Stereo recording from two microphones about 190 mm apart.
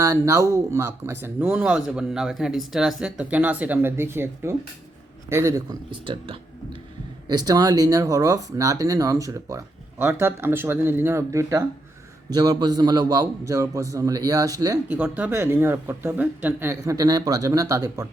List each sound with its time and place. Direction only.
0.0 s a man's voice: 15° right (ahead or behind)
14.9 s speech: 5° right (ahead or behind)